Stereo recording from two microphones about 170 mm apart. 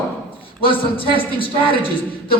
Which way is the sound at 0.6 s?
30° left (ahead or behind).